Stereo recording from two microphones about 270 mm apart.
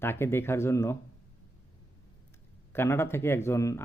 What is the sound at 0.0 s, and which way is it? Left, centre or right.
Speech, centre.